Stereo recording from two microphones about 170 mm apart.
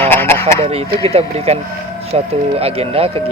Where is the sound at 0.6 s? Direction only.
35° right (ahead or behind).